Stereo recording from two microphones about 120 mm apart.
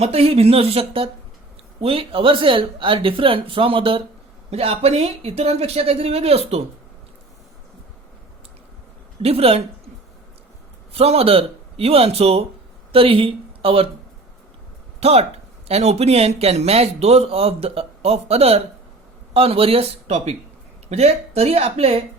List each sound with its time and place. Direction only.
0.0 s speech: 55° right (ahead or behind)
9.2 s speech: 55° right (ahead or behind)
10.9 s speech: 55° right (ahead or behind)
15.0 s speech: 60° right (ahead or behind)